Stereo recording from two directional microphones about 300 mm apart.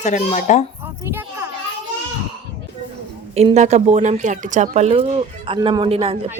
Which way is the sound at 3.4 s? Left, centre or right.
Right.